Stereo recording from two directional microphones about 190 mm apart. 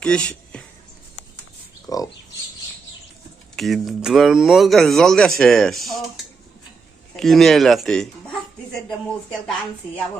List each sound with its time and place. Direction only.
0.0 s speech: 5° left (ahead or behind)
1.9 s speech: 20° left (ahead or behind)
3.5 s speech: centre (ahead or behind)
7.2 s speech: centre (ahead or behind)